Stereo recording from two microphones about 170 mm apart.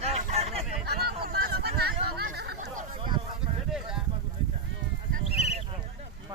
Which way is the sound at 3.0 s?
25° right (ahead or behind).